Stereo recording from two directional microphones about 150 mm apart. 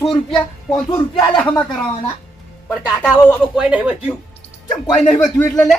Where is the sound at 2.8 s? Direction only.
5° right (ahead or behind).